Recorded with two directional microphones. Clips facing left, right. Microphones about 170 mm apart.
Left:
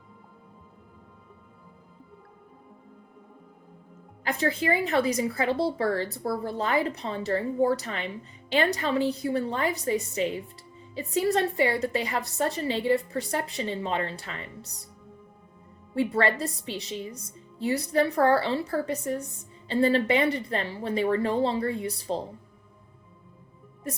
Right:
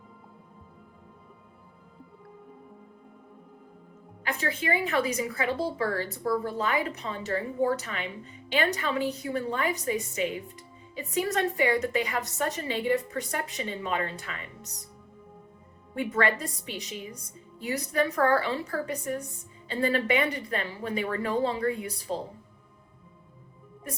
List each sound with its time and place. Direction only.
4.2 s a woman's voice: 35° left (ahead or behind)
16.0 s a woman's voice: 35° left (ahead or behind)